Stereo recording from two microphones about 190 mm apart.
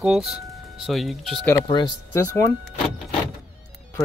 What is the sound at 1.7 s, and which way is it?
Speech, 20° left (ahead or behind).